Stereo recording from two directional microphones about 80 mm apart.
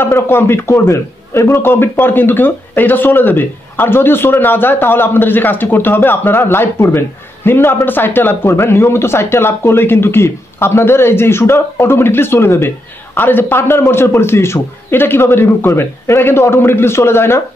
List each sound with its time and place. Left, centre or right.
0.0 s a man's voice: left